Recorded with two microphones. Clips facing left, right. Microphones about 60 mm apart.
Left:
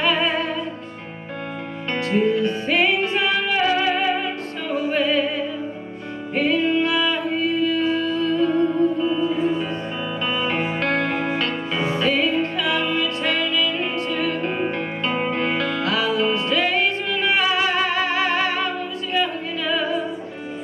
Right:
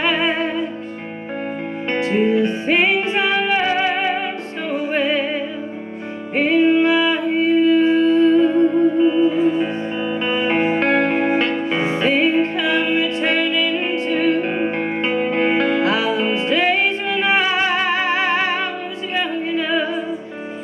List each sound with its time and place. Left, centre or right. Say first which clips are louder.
0.0 s music: right 2 dB; right
2.0 s music: right 3 dB; right